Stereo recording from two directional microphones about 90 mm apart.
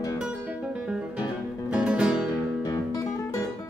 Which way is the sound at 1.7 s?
10° right (ahead or behind).